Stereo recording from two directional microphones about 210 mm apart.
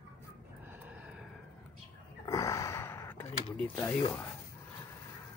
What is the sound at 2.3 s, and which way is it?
Gasp, 15° left (ahead or behind).